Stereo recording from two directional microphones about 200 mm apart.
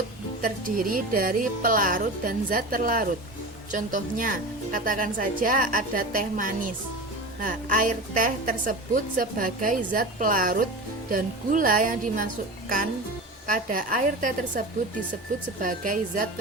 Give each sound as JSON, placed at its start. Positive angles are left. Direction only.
{"t": 0.4, "sound": "a woman's voice", "side_deg": -45}
{"t": 15.6, "sound": "a woman's voice", "side_deg": -40}